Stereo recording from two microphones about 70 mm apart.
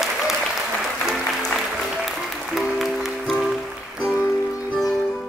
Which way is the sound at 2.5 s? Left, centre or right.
Centre.